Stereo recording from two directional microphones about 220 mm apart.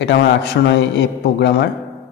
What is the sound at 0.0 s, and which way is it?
A man's voice, 50° left (ahead or behind).